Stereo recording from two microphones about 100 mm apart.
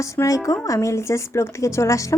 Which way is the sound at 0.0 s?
30° left (ahead or behind).